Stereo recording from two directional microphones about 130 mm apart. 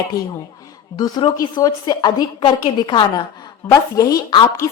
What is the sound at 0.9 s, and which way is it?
A woman's voice, 30° left (ahead or behind).